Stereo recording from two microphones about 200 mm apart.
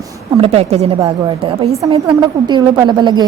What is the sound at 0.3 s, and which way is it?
A woman's voice, 30° right (ahead or behind).